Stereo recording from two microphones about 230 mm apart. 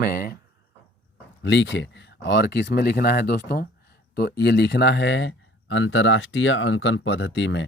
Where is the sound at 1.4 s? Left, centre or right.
Left.